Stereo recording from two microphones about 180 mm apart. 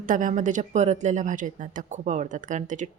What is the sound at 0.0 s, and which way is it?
A woman's voice, 45° right (ahead or behind).